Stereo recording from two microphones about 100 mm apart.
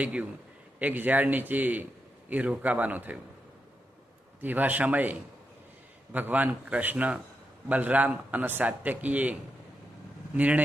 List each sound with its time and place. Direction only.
0.0 s a man's voice: 10° right (ahead or behind)
4.4 s a man's voice: 20° right (ahead or behind)
6.1 s a man's voice: 15° right (ahead or behind)